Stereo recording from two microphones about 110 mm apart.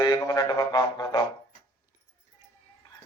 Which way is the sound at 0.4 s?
40° left (ahead or behind).